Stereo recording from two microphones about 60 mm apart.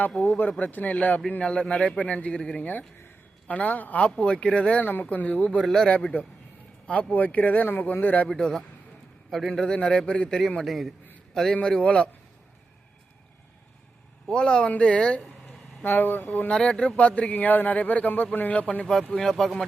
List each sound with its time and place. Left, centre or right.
0.3 s a man's voice: left
2.6 s a man's voice: left
5.5 s a man's voice: centre
7.1 s a man's voice: left
8.3 s a man's voice: centre
10.6 s a man's voice: centre
11.5 s a man's voice: centre
14.3 s a man's voice: centre
15.8 s speech: left
16.5 s a man's voice: centre
19.1 s a man's voice: centre